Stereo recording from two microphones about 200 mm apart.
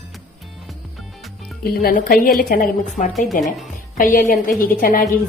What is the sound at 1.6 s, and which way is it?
Speech, 50° left (ahead or behind).